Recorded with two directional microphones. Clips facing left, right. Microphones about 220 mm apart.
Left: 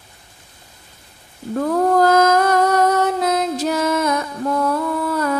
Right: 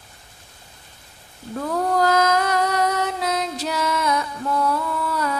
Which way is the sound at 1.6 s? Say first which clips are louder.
Left 6 dB; 50° left (ahead or behind).